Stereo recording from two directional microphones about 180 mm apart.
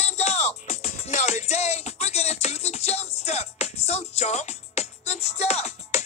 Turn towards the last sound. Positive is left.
turn(degrees=35)  # may be behind; listen again after turning